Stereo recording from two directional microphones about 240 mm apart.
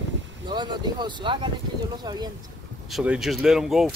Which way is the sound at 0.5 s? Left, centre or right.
Centre.